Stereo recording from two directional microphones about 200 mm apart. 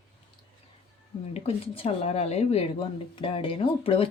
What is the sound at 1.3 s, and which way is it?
Speech, 30° left (ahead or behind).